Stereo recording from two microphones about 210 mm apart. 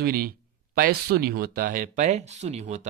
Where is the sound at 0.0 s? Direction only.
45° right (ahead or behind).